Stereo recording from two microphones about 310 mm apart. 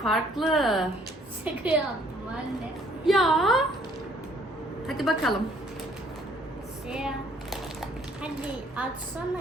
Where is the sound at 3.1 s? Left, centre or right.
Centre.